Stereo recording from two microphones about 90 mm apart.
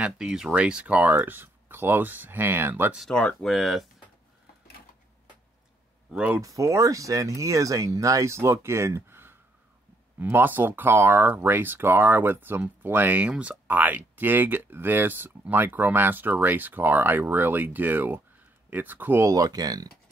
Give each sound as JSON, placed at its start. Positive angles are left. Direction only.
{"t": 0.0, "sound": "speech", "side_deg": -10}
{"t": 3.1, "sound": "speech", "side_deg": 10}
{"t": 3.4, "sound": "speech", "side_deg": 0}
{"t": 6.4, "sound": "speech", "side_deg": -40}
{"t": 19.2, "sound": "speech", "side_deg": -40}